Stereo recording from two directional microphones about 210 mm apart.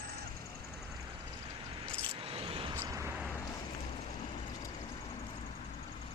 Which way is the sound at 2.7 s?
15° right (ahead or behind).